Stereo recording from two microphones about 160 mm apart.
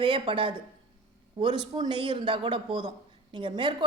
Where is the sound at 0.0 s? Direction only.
30° right (ahead or behind).